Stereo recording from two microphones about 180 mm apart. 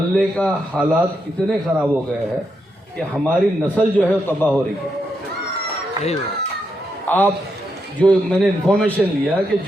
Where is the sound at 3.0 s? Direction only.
5° left (ahead or behind).